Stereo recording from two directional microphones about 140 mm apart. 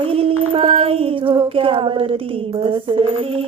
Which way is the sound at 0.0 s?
40° right (ahead or behind).